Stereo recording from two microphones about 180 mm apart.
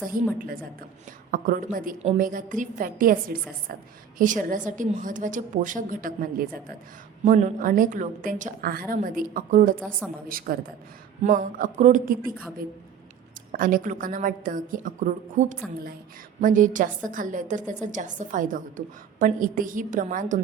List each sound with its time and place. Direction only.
0.3 s a woman's voice: 55° right (ahead or behind)
4.2 s a woman's voice: 45° right (ahead or behind)
7.3 s a woman's voice: 45° right (ahead or behind)
13.5 s a woman's voice: 50° right (ahead or behind)